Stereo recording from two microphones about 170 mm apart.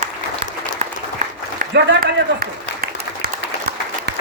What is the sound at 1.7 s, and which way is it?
Applause, 85° right.